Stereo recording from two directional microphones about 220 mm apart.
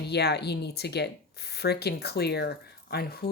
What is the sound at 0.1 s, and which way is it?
Speech, 50° left (ahead or behind).